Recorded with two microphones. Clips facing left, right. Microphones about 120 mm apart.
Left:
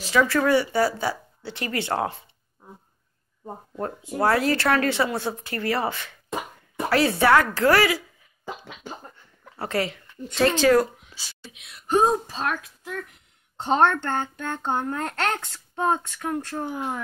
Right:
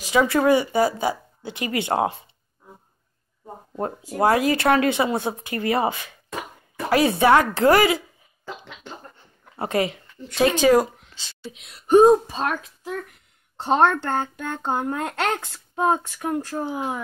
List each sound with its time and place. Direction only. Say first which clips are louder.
0.0 s speech: right 2 dB; 20° right (ahead or behind)
3.7 s a woman's voice: right 2 dB; 20° right (ahead or behind)
8.5 s a sound: left 1 dB; 10° left (ahead or behind)
9.1 s a sound: right 1 dB; 25° right (ahead or behind)
10.3 s speech: right 2 dB; 15° right (ahead or behind)
11.2 s speech: left 2 dB; 10° left (ahead or behind)
11.5 s speech: even; 35° right (ahead or behind)
11.9 s speech: right 7 dB; 15° right (ahead or behind)
13.6 s speech: right 2 dB; 5° right (ahead or behind)